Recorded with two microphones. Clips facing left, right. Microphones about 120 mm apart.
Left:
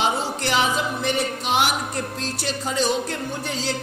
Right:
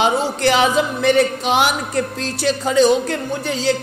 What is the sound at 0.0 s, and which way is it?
Music, 90° right.